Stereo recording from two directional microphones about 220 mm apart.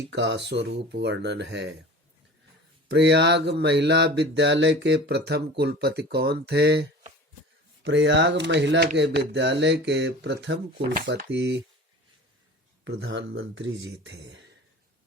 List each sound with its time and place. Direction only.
0.1 s speech: 55° right (ahead or behind)
2.9 s speech: 50° right (ahead or behind)
12.8 s speech: 55° right (ahead or behind)